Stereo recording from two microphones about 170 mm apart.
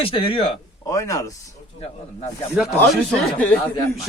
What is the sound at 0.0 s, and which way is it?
Speech, 30° left (ahead or behind).